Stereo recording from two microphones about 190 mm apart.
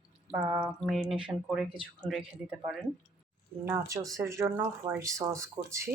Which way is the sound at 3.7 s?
15° right (ahead or behind).